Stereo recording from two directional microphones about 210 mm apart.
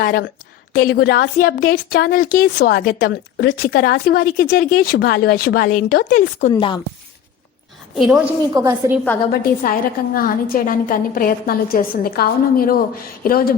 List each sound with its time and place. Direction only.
0.0 s a woman's voice: 45° left (ahead or behind)
6.5 s speech: 25° left (ahead or behind)
7.9 s a woman's voice: centre (ahead or behind)
8.5 s a woman's voice: 15° right (ahead or behind)
9.3 s a woman's voice: 45° left (ahead or behind)